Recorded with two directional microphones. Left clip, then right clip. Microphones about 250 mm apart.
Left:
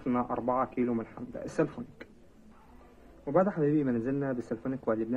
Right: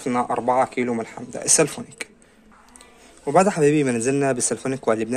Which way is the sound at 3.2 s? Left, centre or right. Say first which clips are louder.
Right 10 dB; right.